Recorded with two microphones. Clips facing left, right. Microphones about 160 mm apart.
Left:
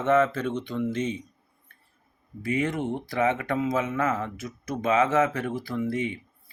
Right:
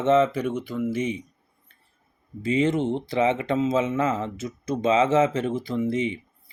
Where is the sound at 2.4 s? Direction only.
25° right (ahead or behind).